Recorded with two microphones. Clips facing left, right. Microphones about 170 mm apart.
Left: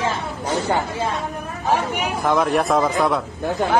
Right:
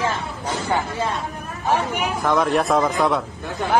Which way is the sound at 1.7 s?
15° left (ahead or behind).